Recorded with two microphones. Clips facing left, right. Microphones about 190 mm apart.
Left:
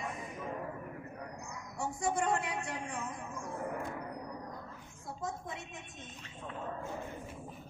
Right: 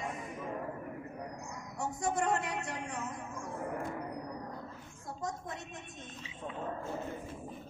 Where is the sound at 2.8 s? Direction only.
5° right (ahead or behind).